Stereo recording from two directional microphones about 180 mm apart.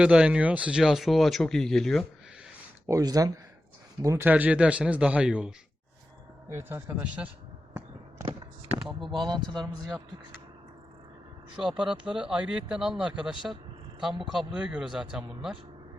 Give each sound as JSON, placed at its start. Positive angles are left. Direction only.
{"t": 0.0, "sound": "speech", "side_deg": -5}
{"t": 2.8, "sound": "speech", "side_deg": -20}
{"t": 8.2, "sound": "a sound", "side_deg": -20}
{"t": 8.9, "sound": "speech", "side_deg": 0}
{"t": 9.1, "sound": "speech", "side_deg": -25}
{"t": 11.5, "sound": "speech", "side_deg": -5}